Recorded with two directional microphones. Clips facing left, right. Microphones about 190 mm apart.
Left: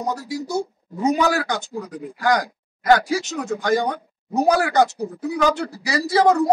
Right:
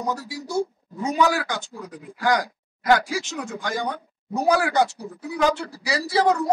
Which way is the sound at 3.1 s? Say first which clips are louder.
Left 5 dB; 40° left (ahead or behind).